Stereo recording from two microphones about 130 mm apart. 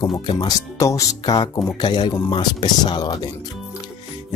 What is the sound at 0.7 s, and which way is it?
Speech, 25° left (ahead or behind).